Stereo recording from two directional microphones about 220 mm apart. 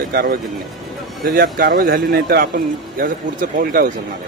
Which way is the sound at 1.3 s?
40° right (ahead or behind).